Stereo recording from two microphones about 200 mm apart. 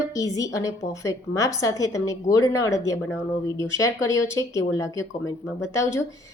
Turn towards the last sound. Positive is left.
turn(degrees=15)  # may be behind; listen again after turning